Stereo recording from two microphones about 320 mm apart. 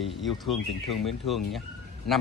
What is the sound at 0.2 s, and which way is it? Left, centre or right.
Speech, centre.